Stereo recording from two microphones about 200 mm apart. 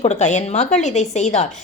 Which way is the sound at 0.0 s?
35° left (ahead or behind).